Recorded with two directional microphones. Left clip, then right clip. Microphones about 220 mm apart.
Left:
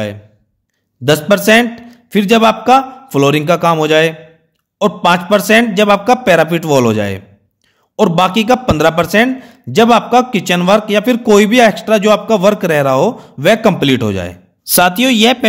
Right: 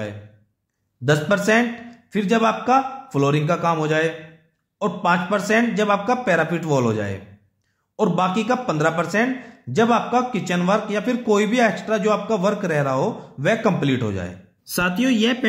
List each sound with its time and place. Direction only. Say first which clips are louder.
1.0 s a man's voice: left 9 dB; 40° left (ahead or behind)